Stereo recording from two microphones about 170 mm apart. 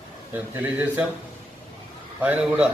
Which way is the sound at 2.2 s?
10° right (ahead or behind).